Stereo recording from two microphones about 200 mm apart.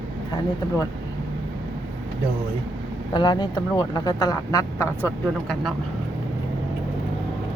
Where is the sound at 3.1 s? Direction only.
20° left (ahead or behind).